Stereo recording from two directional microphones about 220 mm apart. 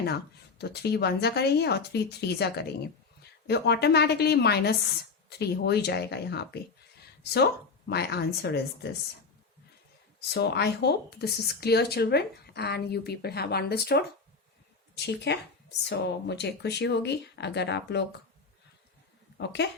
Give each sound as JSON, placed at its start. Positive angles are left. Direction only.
{"t": 0.6, "sound": "speech", "side_deg": 50}
{"t": 7.9, "sound": "speech", "side_deg": 50}
{"t": 10.2, "sound": "speech", "side_deg": 45}
{"t": 19.6, "sound": "speech", "side_deg": 50}